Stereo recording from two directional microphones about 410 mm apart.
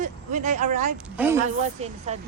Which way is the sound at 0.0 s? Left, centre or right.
Centre.